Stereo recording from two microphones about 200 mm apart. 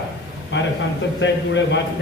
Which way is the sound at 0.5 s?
65° left (ahead or behind).